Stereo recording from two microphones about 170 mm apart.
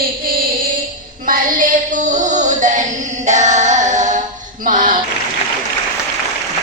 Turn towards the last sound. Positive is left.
turn(degrees=-55)  # may be behind; listen again after turning